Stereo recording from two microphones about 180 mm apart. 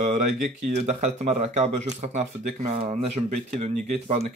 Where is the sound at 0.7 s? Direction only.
40° right (ahead or behind).